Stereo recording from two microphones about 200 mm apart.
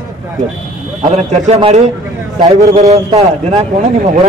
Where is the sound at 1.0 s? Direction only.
40° right (ahead or behind).